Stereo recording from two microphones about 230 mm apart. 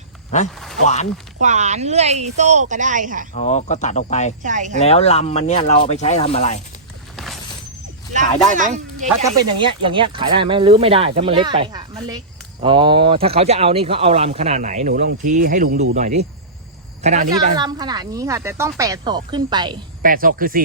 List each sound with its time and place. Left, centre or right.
0.3 s speech: left
1.4 s speech: right
3.3 s speech: left
4.4 s speech: right
4.9 s speech: left
7.2 s a sound: centre
8.5 s speech: right
9.2 s speech: centre
17.3 s speech: centre
20.0 s speech: right